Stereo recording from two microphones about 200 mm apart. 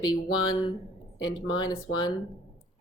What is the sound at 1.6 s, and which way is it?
Speech, 20° left (ahead or behind).